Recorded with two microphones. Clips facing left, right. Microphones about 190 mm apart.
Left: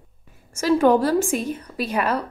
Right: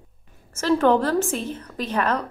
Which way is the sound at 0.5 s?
10° left (ahead or behind).